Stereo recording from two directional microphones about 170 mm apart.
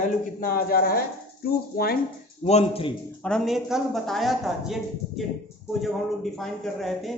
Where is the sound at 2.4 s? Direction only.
35° left (ahead or behind).